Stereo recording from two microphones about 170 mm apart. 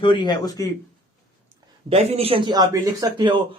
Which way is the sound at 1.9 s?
35° right (ahead or behind).